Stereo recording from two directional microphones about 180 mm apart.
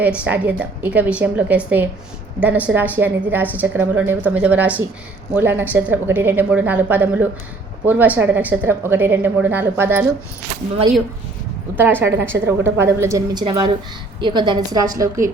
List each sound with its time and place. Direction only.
0.2 s a woman's voice: 10° right (ahead or behind)
11.8 s a woman's voice: 10° right (ahead or behind)